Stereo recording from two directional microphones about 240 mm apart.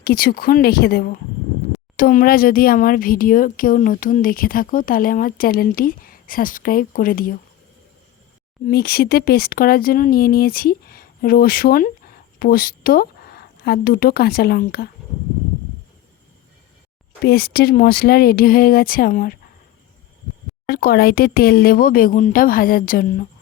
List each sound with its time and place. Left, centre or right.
0.0 s speech: left
8.6 s speech: left
17.2 s speech: left
20.7 s speech: left